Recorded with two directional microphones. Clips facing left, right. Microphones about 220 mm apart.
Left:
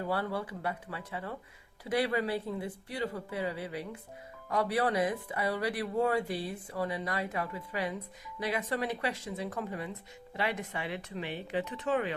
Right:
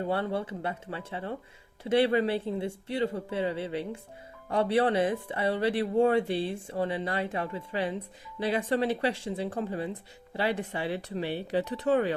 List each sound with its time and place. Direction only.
0.0 s speech: 25° right (ahead or behind)